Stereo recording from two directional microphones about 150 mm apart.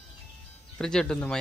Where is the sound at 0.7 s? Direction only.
5° left (ahead or behind).